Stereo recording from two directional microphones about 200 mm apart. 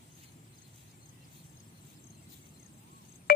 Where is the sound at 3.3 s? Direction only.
50° left (ahead or behind).